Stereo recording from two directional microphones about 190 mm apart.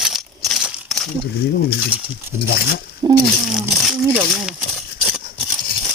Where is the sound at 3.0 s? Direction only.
20° right (ahead or behind).